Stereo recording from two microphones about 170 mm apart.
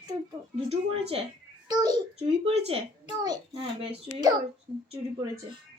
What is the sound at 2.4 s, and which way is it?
A child's voice, 35° right (ahead or behind).